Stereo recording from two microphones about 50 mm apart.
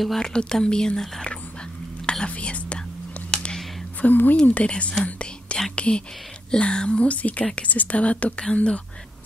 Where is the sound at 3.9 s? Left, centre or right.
Left.